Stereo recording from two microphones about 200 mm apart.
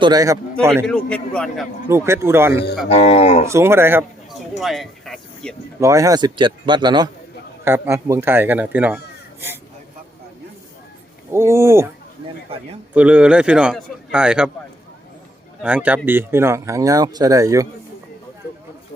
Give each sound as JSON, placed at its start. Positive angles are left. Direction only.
{"t": 0.0, "sound": "a man's voice", "side_deg": -20}
{"t": 0.9, "sound": "a man's voice", "side_deg": 5}
{"t": 1.9, "sound": "speech", "side_deg": -15}
{"t": 2.9, "sound": "speech", "side_deg": 35}
{"t": 3.5, "sound": "speech", "side_deg": -10}
{"t": 4.6, "sound": "speech", "side_deg": 0}
{"t": 5.8, "sound": "a man's voice", "side_deg": -15}
{"t": 11.3, "sound": "speech", "side_deg": -15}
{"t": 12.5, "sound": "a man's voice", "side_deg": -30}
{"t": 12.9, "sound": "a man's voice", "side_deg": -5}
{"t": 15.6, "sound": "speech", "side_deg": -5}